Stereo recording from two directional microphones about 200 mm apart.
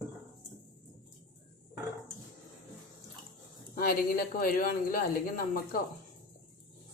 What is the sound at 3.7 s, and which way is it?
Speech, 45° left (ahead or behind).